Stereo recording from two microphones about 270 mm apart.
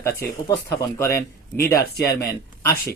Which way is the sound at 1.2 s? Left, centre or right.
Centre.